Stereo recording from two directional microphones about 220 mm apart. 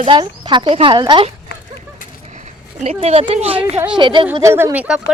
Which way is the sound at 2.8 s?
30° right (ahead or behind).